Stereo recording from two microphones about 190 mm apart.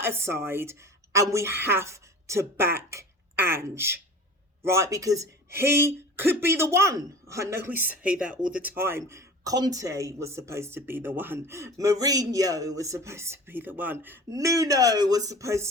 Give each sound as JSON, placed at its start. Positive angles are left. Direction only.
{"t": 0.0, "sound": "a woman's voice", "side_deg": -10}